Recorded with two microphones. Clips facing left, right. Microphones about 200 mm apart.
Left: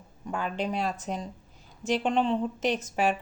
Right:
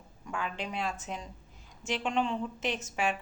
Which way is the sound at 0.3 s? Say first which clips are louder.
Left 6 dB; 35° left (ahead or behind).